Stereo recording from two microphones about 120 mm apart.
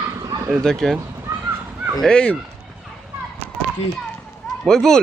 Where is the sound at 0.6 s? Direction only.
5° left (ahead or behind).